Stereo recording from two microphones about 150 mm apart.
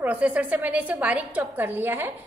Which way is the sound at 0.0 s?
10° right (ahead or behind).